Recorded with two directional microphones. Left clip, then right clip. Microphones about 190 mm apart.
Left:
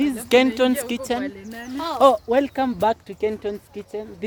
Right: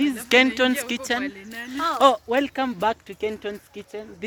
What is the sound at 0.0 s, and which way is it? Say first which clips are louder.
Speech: left 1 dB; centre (ahead or behind).